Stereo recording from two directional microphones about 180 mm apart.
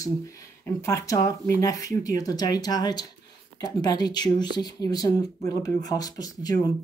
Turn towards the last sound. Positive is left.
turn(degrees=20)  # may be behind; listen again after turning